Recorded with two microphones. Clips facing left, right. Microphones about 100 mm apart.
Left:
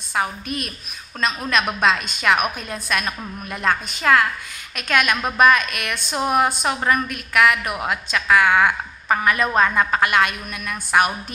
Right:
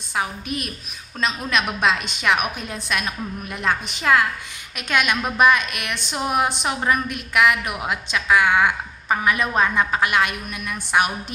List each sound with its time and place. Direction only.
0.1 s a woman's voice: 5° right (ahead or behind)